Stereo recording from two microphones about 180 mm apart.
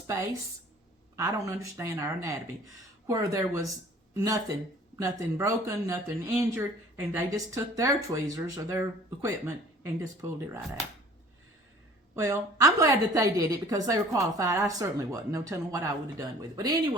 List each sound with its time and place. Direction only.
1.1 s a woman's voice: 15° right (ahead or behind)
12.1 s a woman's voice: 15° right (ahead or behind)